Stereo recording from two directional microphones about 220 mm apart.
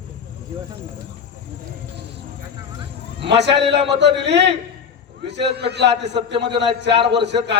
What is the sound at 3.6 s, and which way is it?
A man's voice, 50° right (ahead or behind).